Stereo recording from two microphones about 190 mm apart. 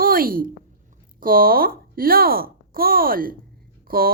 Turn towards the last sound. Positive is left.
turn(degrees=-50)  # may be behind; listen again after turning